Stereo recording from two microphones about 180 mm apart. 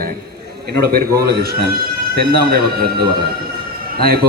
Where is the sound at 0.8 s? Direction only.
60° right (ahead or behind).